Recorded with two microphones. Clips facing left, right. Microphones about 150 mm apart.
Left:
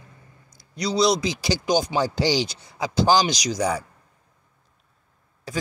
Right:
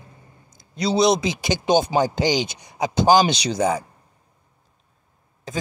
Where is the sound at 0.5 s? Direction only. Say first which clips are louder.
Right 3 dB; 25° right (ahead or behind).